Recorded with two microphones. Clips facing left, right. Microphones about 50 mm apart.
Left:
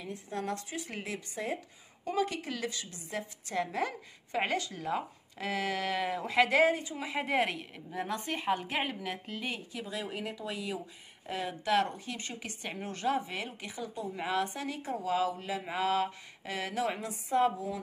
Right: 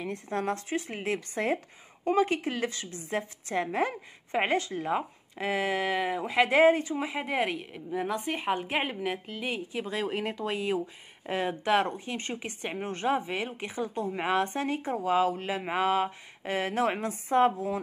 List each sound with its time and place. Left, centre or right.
0.3 s a woman's voice: right
2.0 s a woman's voice: right
9.2 s a woman's voice: centre
9.8 s a woman's voice: right